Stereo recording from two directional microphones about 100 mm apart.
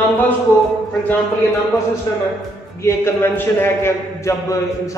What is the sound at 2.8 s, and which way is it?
A man's voice, 25° left (ahead or behind).